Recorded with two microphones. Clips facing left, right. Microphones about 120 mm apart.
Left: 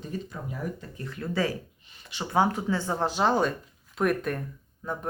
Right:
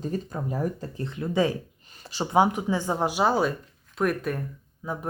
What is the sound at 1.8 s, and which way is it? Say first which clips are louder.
Speech: right 6 dB; 40° right (ahead or behind).